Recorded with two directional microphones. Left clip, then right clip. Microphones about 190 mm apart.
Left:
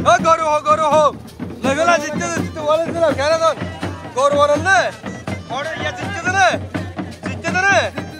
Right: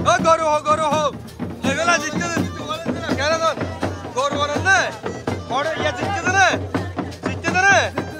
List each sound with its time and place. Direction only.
0.0 s a sound: 5° right (ahead or behind)
1.6 s music: centre (ahead or behind)
2.6 s music: 15° left (ahead or behind)
3.2 s music: 10° right (ahead or behind)
5.5 s music: 25° right (ahead or behind)